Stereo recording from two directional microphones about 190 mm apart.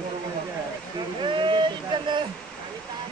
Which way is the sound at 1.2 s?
25° right (ahead or behind).